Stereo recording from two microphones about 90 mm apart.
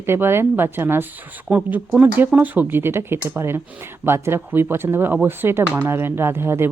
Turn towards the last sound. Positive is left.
turn(degrees=-25)  # may be behind; listen again after turning